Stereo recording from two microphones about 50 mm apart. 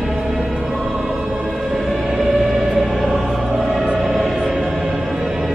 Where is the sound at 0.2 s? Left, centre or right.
Centre.